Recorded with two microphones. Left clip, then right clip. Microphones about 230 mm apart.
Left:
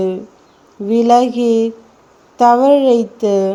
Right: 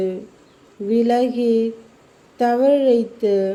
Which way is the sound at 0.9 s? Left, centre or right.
Centre.